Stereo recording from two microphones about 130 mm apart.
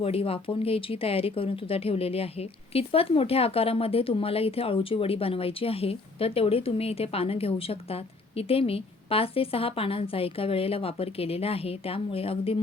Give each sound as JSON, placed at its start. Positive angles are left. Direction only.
{"t": 0.0, "sound": "speech", "side_deg": 50}